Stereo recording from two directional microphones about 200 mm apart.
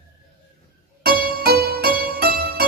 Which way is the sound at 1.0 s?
45° right (ahead or behind).